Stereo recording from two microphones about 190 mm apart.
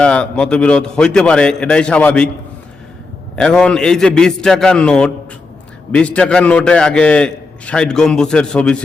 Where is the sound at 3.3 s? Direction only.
5° left (ahead or behind).